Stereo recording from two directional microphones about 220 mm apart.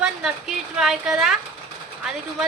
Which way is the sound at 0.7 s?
Centre (ahead or behind).